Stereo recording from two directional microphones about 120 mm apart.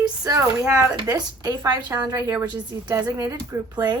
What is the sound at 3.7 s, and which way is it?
Speech, 35° right (ahead or behind).